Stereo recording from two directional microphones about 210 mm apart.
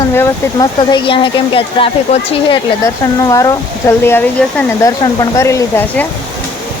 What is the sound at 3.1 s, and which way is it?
Speech, 15° left (ahead or behind).